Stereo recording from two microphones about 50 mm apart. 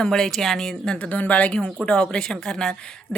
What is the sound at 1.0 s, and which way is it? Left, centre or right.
Speech, left.